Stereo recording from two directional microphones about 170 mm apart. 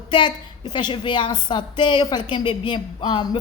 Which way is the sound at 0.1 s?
25° left (ahead or behind).